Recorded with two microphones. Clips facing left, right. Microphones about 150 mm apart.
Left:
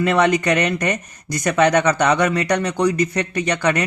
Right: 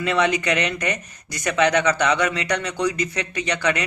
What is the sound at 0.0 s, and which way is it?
Speech, 50° left (ahead or behind).